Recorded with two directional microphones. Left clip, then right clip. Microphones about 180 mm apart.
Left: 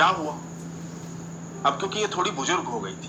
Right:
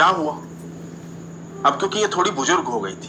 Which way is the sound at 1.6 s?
25° right (ahead or behind).